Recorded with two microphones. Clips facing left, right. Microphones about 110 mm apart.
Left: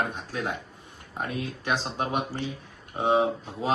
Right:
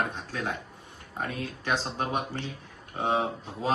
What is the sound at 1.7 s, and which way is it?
Speech, 15° left (ahead or behind).